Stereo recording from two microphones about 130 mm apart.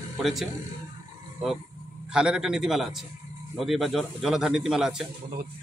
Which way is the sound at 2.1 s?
5° right (ahead or behind).